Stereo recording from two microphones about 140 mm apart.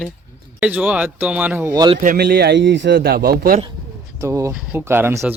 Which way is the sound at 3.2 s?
90° right.